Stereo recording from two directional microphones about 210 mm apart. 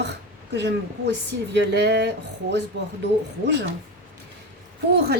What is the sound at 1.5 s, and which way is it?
Speech, 55° right (ahead or behind).